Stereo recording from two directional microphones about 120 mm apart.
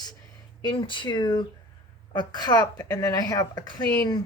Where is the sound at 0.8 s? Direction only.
40° left (ahead or behind).